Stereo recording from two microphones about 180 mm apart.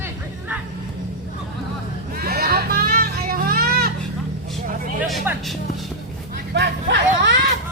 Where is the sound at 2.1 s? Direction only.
55° right (ahead or behind).